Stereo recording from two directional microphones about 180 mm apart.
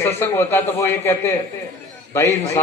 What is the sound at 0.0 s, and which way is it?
A man's voice, 10° left (ahead or behind).